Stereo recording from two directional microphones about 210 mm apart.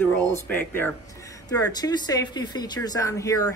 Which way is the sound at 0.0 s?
10° left (ahead or behind).